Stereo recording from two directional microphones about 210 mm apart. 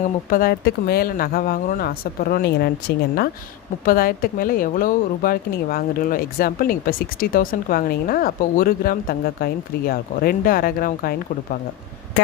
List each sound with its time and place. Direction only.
0.0 s speech: 40° left (ahead or behind)
3.8 s speech: 45° left (ahead or behind)